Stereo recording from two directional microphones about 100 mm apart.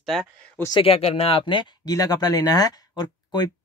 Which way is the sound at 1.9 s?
40° left (ahead or behind).